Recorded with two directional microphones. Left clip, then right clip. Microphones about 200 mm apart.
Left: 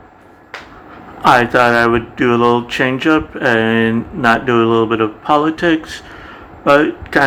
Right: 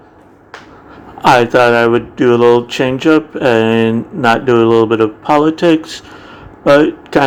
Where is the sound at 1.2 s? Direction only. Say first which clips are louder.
Right 2 dB; 15° right (ahead or behind).